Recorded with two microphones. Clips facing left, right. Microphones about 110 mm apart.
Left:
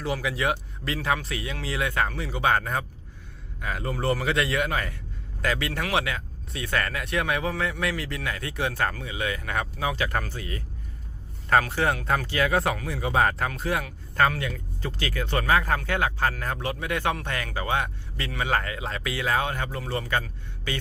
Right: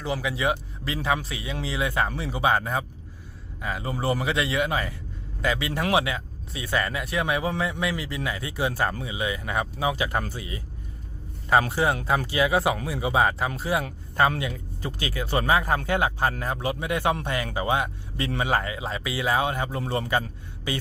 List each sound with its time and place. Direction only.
0.0 s a man's voice: centre (ahead or behind)
11.7 s speech: 10° right (ahead or behind)
19.8 s a man's voice: 25° right (ahead or behind)